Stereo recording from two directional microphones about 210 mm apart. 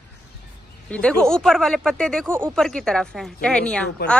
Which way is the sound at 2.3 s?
10° right (ahead or behind).